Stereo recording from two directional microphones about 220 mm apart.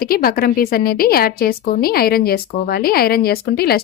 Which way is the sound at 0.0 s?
40° left (ahead or behind).